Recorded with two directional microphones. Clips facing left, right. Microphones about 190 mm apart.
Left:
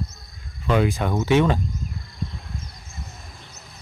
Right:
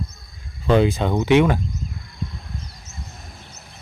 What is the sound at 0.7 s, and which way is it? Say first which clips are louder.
Speech: right 4 dB; 25° right (ahead or behind).